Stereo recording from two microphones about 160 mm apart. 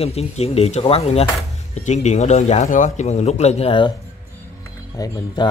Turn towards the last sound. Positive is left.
turn(degrees=25)  # may be behind; listen again after turning